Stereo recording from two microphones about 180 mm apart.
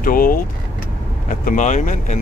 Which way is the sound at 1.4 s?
45° left (ahead or behind).